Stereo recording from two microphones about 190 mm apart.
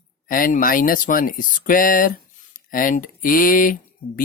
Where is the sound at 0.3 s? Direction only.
45° left (ahead or behind).